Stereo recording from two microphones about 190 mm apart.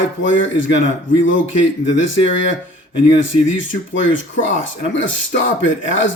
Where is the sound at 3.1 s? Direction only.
80° left.